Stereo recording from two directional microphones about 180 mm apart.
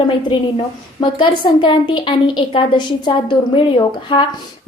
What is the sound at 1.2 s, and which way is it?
A woman's voice, 30° left (ahead or behind).